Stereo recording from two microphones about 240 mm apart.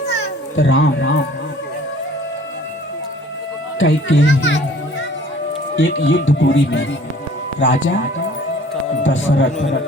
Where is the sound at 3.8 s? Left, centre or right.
Left.